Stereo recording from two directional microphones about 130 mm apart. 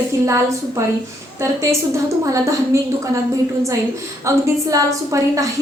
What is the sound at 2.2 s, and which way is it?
Speech, 25° right (ahead or behind).